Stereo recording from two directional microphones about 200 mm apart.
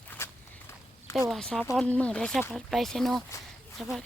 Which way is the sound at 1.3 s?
5° left (ahead or behind).